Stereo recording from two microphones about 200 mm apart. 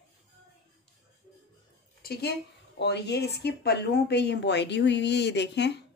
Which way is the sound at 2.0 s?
55° left (ahead or behind).